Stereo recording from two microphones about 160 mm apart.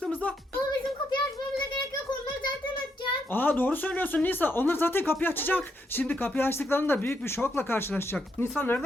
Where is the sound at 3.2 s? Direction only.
10° left (ahead or behind).